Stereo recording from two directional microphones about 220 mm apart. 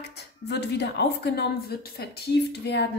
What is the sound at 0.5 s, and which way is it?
A woman's voice, 50° left (ahead or behind).